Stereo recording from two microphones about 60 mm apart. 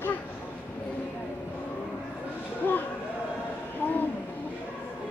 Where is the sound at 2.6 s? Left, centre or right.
Left.